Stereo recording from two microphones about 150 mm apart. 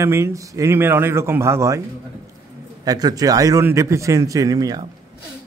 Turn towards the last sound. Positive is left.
turn(degrees=-25)  # may be behind; listen again after turning